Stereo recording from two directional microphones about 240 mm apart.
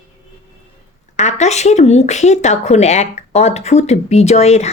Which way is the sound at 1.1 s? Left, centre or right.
Left.